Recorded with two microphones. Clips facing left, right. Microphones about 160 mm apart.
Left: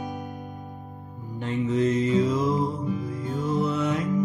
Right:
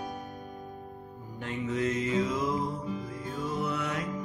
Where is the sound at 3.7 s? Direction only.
25° left (ahead or behind).